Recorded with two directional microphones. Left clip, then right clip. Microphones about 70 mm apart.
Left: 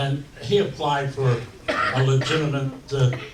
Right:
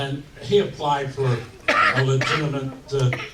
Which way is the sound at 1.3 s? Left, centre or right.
Right.